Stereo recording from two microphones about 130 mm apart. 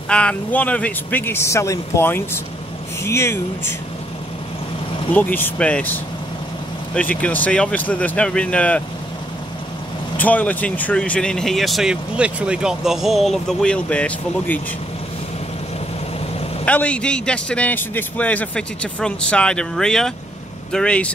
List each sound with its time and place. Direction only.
0.1 s a man's voice: 10° left (ahead or behind)
5.1 s a man's voice: 15° left (ahead or behind)
7.0 s a man's voice: 10° left (ahead or behind)
10.1 s speech: 10° left (ahead or behind)
16.6 s a man's voice: 10° left (ahead or behind)